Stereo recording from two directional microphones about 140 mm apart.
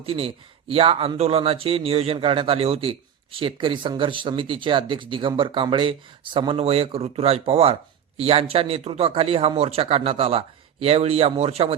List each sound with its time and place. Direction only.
0.0 s speech: 45° right (ahead or behind)